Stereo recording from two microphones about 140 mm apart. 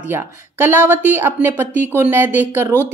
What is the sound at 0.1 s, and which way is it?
A woman's voice, 15° right (ahead or behind).